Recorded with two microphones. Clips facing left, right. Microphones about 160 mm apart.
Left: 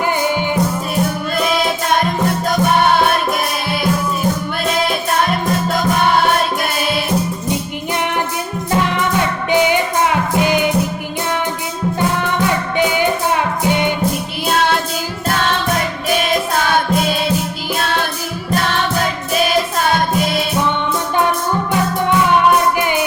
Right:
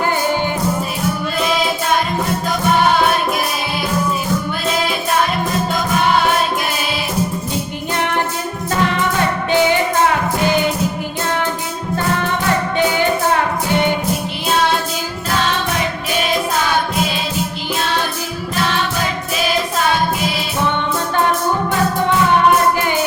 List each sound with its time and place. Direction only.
9.5 s music: 15° left (ahead or behind)
12.7 s music: 15° left (ahead or behind)